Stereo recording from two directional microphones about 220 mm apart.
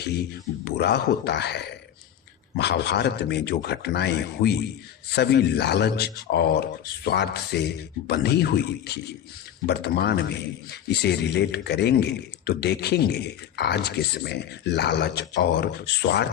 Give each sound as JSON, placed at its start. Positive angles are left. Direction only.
{"t": 0.0, "sound": "a man's voice", "side_deg": 45}